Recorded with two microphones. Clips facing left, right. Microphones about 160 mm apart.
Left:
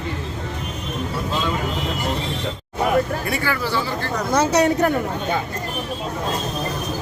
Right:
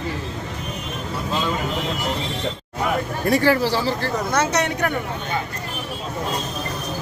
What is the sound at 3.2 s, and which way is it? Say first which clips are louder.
Speech: right 6 dB; 35° right (ahead or behind).